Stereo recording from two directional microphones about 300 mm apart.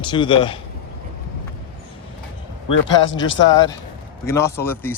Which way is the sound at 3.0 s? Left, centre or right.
Left.